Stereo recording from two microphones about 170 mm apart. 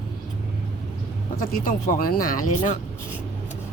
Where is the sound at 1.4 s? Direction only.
55° left (ahead or behind).